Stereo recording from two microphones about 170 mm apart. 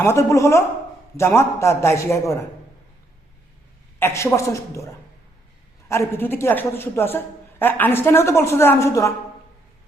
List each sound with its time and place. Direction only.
0.0 s speech: 15° left (ahead or behind)
4.0 s speech: 15° left (ahead or behind)
5.9 s speech: 15° left (ahead or behind)